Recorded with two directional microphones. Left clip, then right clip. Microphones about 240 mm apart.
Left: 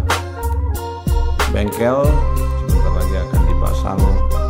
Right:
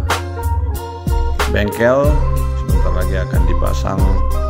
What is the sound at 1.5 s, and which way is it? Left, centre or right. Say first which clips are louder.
Speech: right 5 dB; centre.